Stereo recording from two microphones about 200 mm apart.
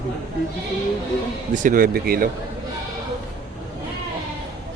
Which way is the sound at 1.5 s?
45° right (ahead or behind).